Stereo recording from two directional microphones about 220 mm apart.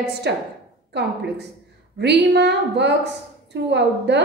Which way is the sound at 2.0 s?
50° right (ahead or behind).